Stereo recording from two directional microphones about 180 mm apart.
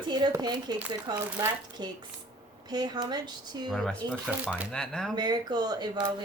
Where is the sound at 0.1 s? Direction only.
25° right (ahead or behind).